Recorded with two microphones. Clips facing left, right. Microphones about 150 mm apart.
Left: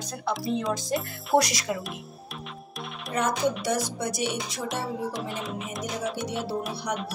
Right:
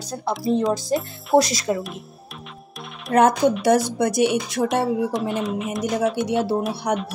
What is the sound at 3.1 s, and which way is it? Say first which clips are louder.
Speech: right 12 dB; 65° right (ahead or behind).